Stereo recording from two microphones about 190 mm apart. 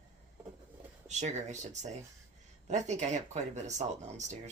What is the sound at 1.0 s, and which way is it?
Speech, 40° right (ahead or behind).